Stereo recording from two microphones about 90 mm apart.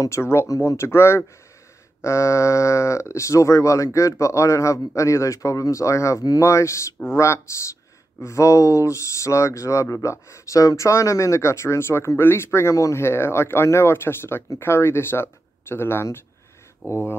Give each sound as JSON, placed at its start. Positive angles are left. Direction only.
{"t": 0.0, "sound": "speech", "side_deg": 30}